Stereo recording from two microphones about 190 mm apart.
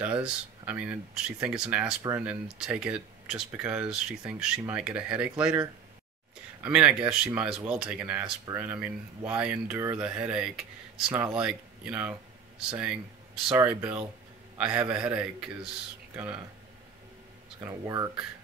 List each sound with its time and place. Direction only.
0.0 s speech: 10° right (ahead or behind)
13.5 s speech: 10° right (ahead or behind)
17.6 s speech: 15° right (ahead or behind)